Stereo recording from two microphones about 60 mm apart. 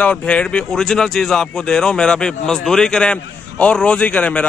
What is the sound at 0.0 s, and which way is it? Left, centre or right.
Speech, centre.